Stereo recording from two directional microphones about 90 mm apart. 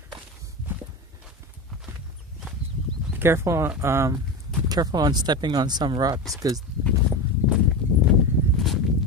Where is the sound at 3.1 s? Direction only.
25° right (ahead or behind).